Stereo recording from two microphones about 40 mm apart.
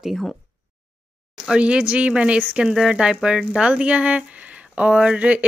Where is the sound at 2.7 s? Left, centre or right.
Centre.